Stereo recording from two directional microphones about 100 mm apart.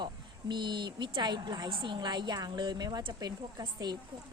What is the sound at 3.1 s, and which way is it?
Speech, 40° right (ahead or behind).